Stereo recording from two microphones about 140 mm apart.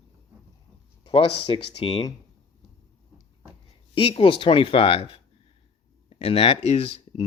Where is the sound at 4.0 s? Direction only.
40° left (ahead or behind).